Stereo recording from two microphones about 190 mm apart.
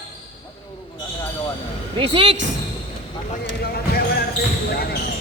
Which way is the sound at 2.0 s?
30° right (ahead or behind).